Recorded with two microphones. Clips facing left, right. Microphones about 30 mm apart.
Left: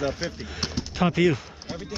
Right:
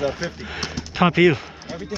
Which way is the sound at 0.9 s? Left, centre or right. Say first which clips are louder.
Right 6 dB; right.